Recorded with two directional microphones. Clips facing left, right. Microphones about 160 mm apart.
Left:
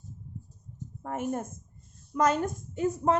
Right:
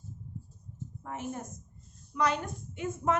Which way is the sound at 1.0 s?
50° left (ahead or behind).